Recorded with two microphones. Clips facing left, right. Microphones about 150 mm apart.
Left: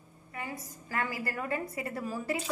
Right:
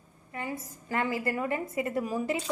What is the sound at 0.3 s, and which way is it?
A woman's voice, 25° right (ahead or behind).